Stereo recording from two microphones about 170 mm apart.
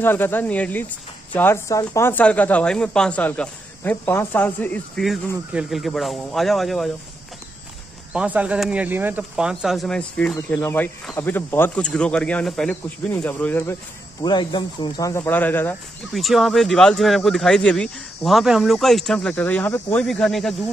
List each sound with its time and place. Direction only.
0.0 s speech: 10° left (ahead or behind)
5.5 s speech: 5° right (ahead or behind)
8.1 s speech: 10° right (ahead or behind); by 13.7 s 10° left (ahead or behind)
14.2 s speech: 25° left (ahead or behind)
16.1 s speech: centre (ahead or behind)